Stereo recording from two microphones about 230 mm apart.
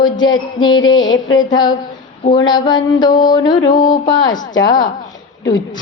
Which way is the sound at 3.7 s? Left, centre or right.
Left.